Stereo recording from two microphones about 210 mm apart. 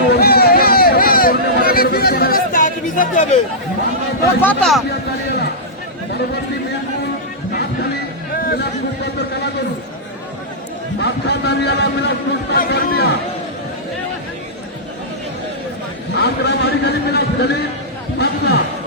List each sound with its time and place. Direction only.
0.1 s a sound: 50° left (ahead or behind)
4.4 s speech: 5° left (ahead or behind)
11.0 s speech: 50° left (ahead or behind)
16.1 s a man's voice: 55° left (ahead or behind)